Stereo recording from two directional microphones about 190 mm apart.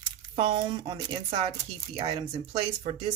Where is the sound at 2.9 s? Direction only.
30° right (ahead or behind).